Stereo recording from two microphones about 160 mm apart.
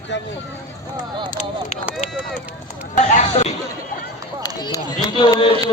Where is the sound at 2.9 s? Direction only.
45° left (ahead or behind).